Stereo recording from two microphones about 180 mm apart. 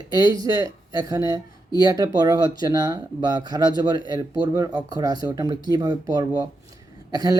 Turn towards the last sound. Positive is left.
turn(degrees=-20)  # may be behind; listen again after turning